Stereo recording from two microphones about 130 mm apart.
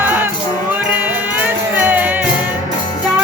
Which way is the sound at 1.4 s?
15° right (ahead or behind).